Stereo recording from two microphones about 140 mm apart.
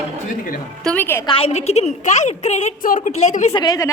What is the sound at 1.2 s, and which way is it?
A woman's voice, 45° left (ahead or behind).